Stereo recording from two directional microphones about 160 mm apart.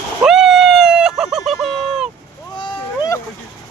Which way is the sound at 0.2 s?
Centre (ahead or behind).